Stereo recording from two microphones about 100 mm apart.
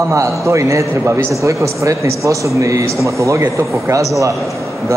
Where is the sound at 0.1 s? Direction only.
30° right (ahead or behind).